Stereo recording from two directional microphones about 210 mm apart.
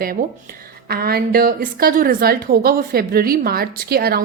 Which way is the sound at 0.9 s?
45° right (ahead or behind).